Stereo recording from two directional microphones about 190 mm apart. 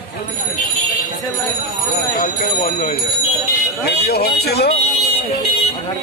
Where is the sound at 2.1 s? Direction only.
45° left (ahead or behind).